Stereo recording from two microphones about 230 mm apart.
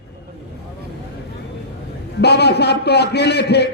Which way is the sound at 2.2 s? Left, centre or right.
Left.